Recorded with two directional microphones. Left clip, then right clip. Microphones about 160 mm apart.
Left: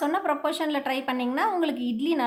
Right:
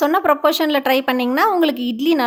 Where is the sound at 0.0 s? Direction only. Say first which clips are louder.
Right 10 dB; 40° right (ahead or behind).